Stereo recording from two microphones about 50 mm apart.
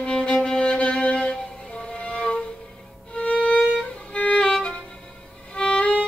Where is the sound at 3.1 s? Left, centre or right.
Left.